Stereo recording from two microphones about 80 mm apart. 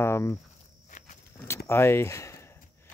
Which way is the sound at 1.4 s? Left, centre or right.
Left.